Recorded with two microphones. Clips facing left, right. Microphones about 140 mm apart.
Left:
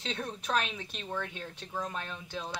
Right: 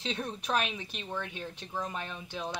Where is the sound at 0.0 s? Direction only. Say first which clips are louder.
Right 1 dB; 10° right (ahead or behind).